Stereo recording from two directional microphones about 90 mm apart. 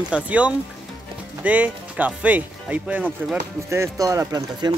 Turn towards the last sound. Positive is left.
turn(degrees=-45)  # may be behind; listen again after turning